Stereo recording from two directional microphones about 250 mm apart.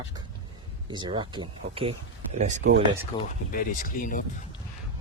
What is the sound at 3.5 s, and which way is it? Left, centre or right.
Speech, left.